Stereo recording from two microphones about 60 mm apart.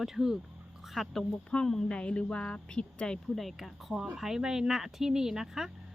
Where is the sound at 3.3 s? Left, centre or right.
Centre.